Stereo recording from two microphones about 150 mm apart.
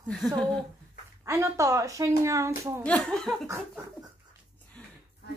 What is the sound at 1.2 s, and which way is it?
Speech, 20° right (ahead or behind).